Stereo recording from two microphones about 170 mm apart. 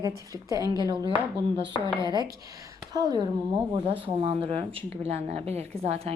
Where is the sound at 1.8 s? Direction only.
25° right (ahead or behind).